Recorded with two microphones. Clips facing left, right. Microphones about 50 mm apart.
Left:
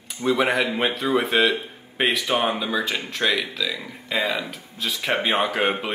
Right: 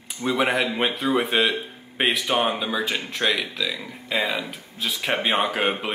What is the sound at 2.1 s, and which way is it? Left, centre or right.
Speech, right.